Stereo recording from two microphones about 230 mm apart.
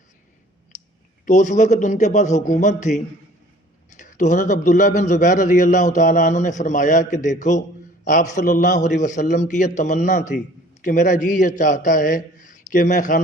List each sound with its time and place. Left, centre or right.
1.2 s a man's voice: left